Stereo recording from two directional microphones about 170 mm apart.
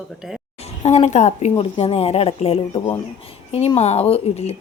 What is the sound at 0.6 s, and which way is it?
A woman's voice, 40° left (ahead or behind).